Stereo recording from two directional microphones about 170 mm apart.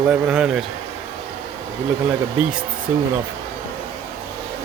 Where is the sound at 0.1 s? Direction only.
5° right (ahead or behind).